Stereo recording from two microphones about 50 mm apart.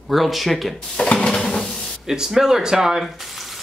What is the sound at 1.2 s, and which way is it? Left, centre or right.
Stir, centre.